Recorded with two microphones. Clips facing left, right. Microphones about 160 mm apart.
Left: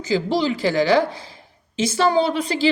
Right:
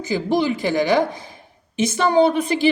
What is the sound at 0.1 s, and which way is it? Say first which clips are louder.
A woman's voice: even; 15° right (ahead or behind).